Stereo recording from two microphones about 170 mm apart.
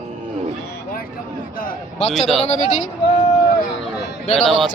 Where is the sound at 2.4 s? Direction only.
45° left (ahead or behind).